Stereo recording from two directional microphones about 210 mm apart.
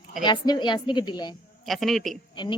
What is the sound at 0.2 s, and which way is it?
Speech, 20° left (ahead or behind).